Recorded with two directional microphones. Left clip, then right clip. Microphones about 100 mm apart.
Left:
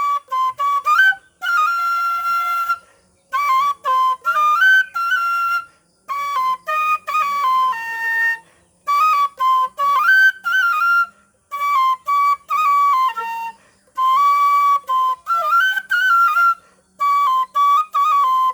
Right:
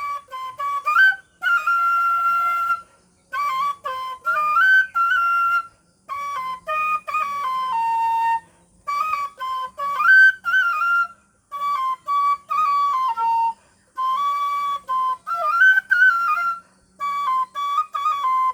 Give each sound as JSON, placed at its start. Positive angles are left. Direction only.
{"t": 0.0, "sound": "flute", "side_deg": 15}